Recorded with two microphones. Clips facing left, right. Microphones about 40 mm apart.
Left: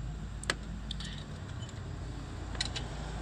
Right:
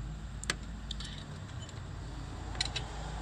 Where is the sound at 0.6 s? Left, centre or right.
Centre.